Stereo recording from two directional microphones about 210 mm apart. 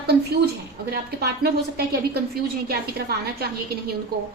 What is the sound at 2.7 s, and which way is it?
Speech, 50° right (ahead or behind).